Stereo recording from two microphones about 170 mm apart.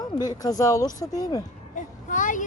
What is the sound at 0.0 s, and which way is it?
Speech, 25° left (ahead or behind).